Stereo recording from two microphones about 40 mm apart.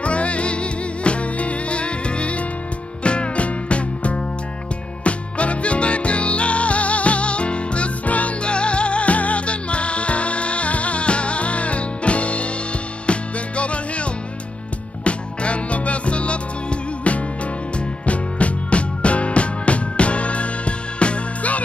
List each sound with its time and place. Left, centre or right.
0.0 s music: left
15.0 s music: left
17.7 s music: left